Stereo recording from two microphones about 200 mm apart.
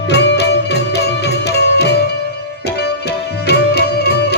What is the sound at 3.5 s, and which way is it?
Music, 55° left (ahead or behind).